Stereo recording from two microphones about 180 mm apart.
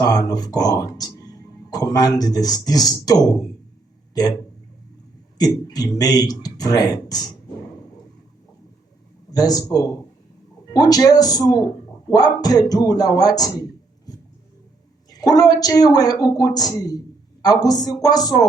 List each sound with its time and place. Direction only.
0.0 s speech: 20° left (ahead or behind)
5.4 s speech: 20° left (ahead or behind)
9.3 s speech: 20° left (ahead or behind)